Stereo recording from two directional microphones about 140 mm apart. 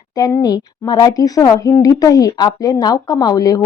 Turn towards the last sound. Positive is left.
turn(degrees=25)  # may be behind; listen again after turning